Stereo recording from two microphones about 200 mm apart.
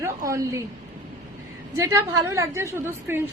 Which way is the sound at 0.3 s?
15° right (ahead or behind).